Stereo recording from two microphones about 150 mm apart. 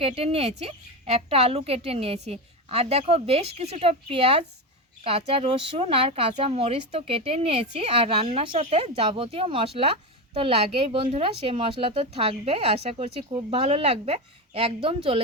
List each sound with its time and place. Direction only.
0.0 s speech: 40° right (ahead or behind)